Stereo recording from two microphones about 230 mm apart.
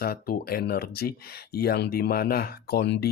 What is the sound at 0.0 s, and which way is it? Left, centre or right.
Speech, left.